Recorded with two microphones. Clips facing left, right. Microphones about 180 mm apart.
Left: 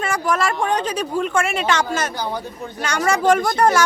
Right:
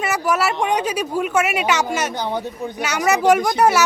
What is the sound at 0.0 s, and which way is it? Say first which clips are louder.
Speech: right 1 dB; 10° right (ahead or behind).